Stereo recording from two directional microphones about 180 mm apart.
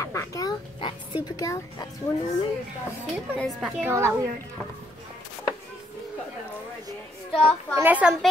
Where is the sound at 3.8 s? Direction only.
15° right (ahead or behind).